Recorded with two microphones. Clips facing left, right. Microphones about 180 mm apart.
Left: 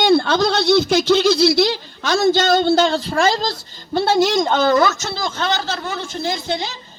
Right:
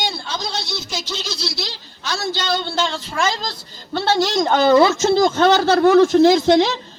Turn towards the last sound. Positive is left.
turn(degrees=-75)  # may be behind; listen again after turning